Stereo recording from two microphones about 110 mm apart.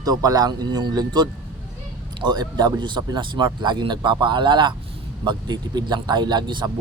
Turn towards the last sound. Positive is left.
turn(degrees=-45)  # may be behind; listen again after turning